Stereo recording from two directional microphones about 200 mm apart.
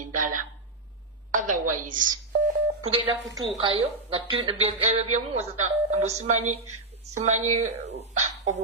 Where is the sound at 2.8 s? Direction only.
25° right (ahead or behind).